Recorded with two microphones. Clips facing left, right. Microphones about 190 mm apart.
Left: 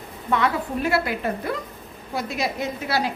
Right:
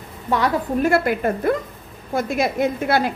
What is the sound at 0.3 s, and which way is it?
A woman's voice, 45° right (ahead or behind).